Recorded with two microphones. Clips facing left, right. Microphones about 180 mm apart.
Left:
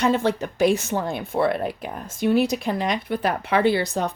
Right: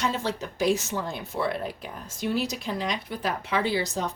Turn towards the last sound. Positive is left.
turn(degrees=60)  # may be behind; listen again after turning